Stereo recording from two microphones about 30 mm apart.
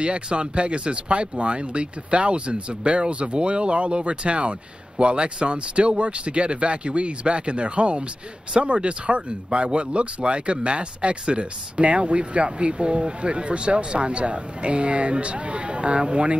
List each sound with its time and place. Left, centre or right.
0.0 s speech: right